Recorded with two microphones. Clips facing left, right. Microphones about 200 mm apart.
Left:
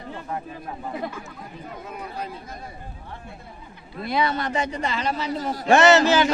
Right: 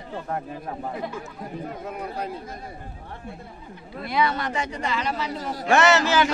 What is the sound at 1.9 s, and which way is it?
Speech, 55° right (ahead or behind).